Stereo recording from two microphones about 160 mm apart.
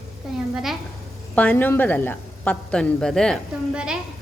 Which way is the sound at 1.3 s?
10° left (ahead or behind).